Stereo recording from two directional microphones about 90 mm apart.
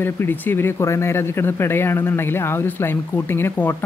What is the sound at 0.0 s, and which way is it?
Speech, 25° left (ahead or behind).